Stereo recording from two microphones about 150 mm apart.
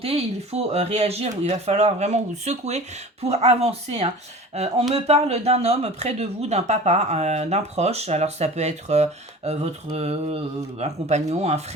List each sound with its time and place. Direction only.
0.0 s speech: 40° right (ahead or behind)